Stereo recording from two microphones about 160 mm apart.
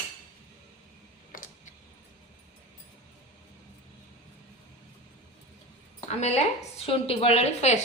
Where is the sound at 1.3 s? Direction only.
60° left (ahead or behind).